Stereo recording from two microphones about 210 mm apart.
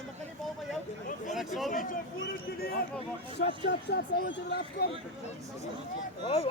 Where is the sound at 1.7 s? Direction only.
40° left (ahead or behind).